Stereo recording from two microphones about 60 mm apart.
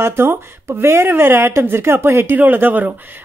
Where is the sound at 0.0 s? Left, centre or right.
Right.